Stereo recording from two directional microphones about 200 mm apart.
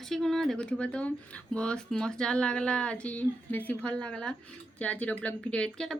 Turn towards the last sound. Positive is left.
turn(degrees=5)  # may be behind; listen again after turning